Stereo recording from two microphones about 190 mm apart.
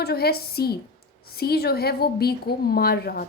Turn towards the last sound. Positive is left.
turn(degrees=55)  # may be behind; listen again after turning